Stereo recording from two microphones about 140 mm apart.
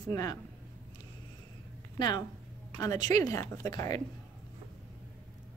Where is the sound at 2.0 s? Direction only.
30° left (ahead or behind).